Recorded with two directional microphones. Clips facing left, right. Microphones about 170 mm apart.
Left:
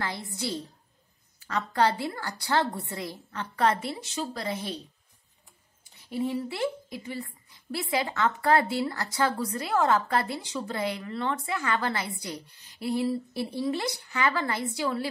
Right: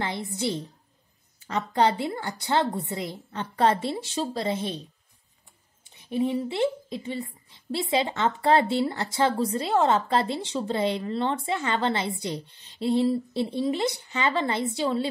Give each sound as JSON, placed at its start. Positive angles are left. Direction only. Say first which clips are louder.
{"t": 0.0, "sound": "a woman's voice", "louder": "right 4 dB", "side_deg": -20}
{"t": 5.9, "sound": "a woman's voice", "louder": "right 4 dB", "side_deg": -20}